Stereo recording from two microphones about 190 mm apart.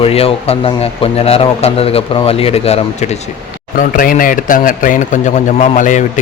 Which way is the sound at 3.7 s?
45° left (ahead or behind).